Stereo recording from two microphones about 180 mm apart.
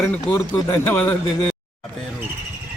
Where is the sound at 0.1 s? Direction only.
15° left (ahead or behind).